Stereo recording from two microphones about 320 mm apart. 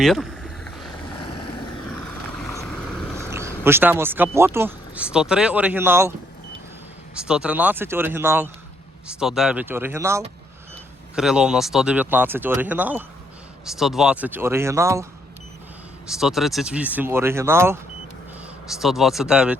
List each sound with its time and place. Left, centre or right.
0.0 s vehicle: centre
1.2 s vehicle: left
2.4 s vehicle: centre
3.2 s speech: centre
7.2 s speech: centre
16.0 s speech: centre
18.8 s speech: centre